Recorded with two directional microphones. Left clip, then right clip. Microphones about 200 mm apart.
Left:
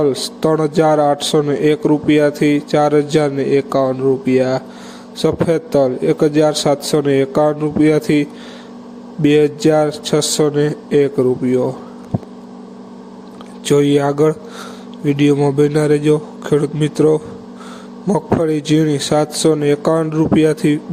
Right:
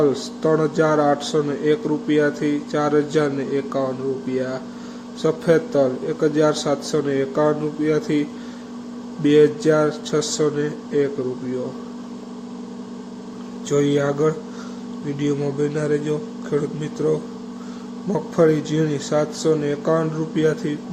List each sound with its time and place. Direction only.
0.0 s a man's voice: 40° left (ahead or behind)
13.7 s speech: 45° left (ahead or behind)